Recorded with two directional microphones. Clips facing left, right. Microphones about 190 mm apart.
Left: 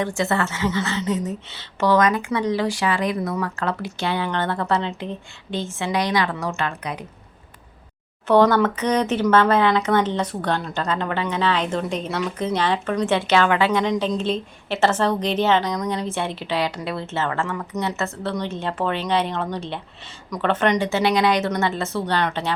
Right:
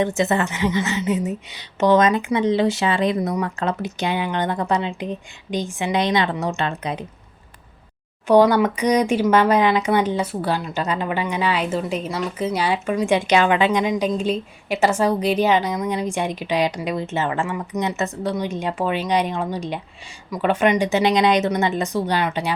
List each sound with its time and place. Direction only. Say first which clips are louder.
0.0 s a woman's voice: right 3 dB; 20° right (ahead or behind)
8.3 s a woman's voice: right 2 dB; 10° right (ahead or behind)